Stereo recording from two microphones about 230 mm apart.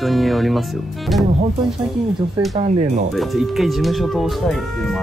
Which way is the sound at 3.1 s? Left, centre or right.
Centre.